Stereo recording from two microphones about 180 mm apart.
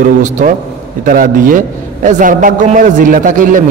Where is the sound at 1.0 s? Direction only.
50° right (ahead or behind).